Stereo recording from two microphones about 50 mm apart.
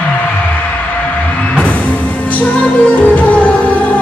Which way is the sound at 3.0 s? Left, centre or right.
Left.